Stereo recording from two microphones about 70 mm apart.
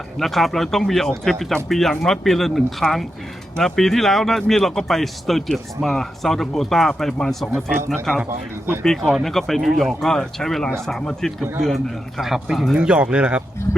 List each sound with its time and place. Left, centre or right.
0.2 s speech: centre